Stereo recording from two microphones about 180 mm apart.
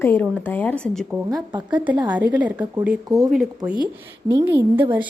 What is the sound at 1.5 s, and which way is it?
Speech, 25° right (ahead or behind).